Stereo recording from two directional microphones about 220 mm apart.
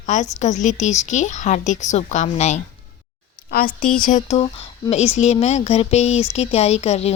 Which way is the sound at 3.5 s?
40° left (ahead or behind).